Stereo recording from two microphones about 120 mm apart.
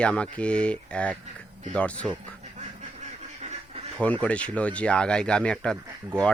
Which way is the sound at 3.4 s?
60° right (ahead or behind).